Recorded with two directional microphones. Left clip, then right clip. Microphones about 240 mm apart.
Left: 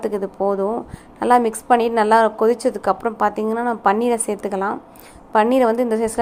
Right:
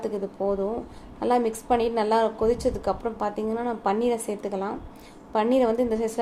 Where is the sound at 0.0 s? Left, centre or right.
Left.